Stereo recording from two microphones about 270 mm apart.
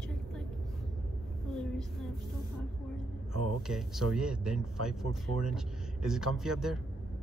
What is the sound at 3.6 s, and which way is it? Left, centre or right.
Speech, centre.